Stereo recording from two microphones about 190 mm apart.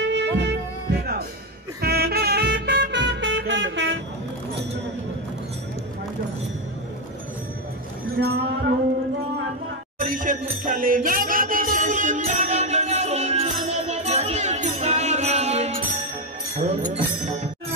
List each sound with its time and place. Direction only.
0.0 s music: 65° right (ahead or behind)
8.2 s a sound: 55° right (ahead or behind)
9.9 s music: 45° right (ahead or behind)